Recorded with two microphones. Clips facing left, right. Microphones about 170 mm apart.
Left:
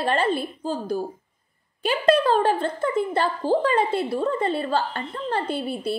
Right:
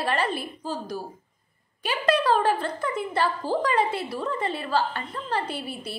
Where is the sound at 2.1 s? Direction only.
30° left (ahead or behind).